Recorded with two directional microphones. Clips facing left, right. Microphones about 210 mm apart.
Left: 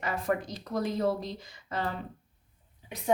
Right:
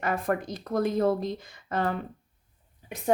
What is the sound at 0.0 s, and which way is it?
Speech, 50° right (ahead or behind).